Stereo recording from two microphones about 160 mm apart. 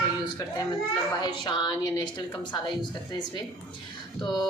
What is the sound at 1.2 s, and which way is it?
Speech, 30° left (ahead or behind).